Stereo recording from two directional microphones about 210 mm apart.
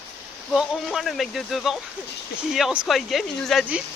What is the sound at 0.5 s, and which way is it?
Speech, centre (ahead or behind).